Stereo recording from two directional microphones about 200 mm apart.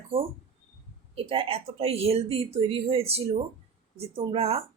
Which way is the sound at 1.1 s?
25° right (ahead or behind).